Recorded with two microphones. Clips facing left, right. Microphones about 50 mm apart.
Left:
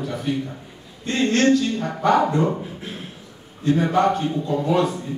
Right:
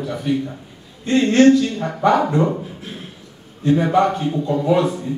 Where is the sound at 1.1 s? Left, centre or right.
Right.